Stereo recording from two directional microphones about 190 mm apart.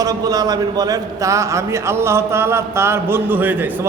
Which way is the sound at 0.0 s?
20° right (ahead or behind).